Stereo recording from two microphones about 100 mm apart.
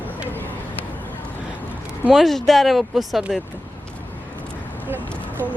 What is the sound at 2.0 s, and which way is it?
Speech, centre (ahead or behind).